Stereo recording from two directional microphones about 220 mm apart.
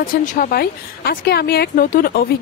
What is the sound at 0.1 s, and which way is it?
Speech, 40° left (ahead or behind).